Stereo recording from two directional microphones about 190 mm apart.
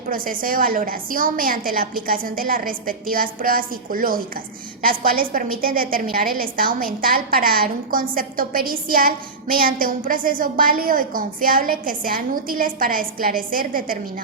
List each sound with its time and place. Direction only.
0.1 s a woman's voice: 50° right (ahead or behind)